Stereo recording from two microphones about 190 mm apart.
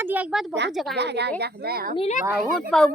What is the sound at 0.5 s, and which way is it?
Speech, 65° right (ahead or behind).